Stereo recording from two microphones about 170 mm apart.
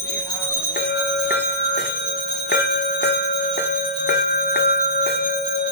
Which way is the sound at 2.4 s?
75° left (ahead or behind).